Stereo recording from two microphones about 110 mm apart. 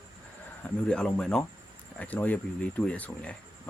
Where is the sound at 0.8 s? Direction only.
10° left (ahead or behind).